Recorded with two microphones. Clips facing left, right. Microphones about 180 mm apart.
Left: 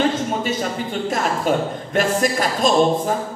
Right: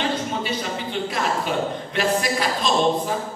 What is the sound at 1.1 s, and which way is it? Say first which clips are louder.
Speech: left 5 dB; 45° left (ahead or behind).